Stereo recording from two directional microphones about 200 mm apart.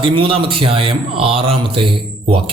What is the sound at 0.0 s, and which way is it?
A man's voice, 25° right (ahead or behind).